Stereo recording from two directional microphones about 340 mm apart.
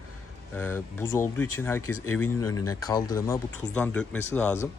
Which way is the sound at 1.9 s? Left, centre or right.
Left.